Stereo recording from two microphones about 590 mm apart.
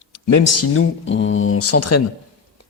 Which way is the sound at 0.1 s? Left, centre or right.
Left.